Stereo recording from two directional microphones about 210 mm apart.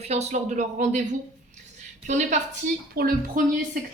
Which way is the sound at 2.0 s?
35° right (ahead or behind).